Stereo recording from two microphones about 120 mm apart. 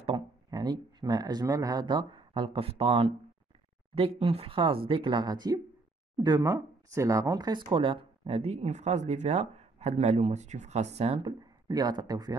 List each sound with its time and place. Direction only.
0.5 s speech: 35° right (ahead or behind)